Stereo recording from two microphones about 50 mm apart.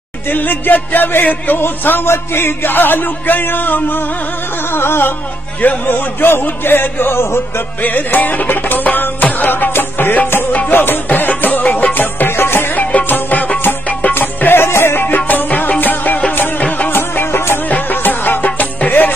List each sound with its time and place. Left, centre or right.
0.3 s speech: left
4.6 s speech: left
5.6 s speech: left
7.8 s music: left
10.7 s speech: left
11.1 s music: left
12.7 s music: left
14.1 s music: left
17.6 s music: left